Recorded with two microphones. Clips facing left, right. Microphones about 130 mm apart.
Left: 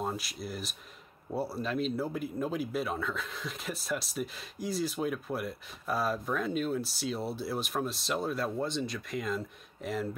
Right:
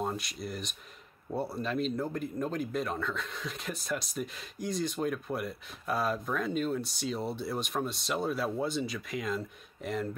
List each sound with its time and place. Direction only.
0.0 s speech: centre (ahead or behind)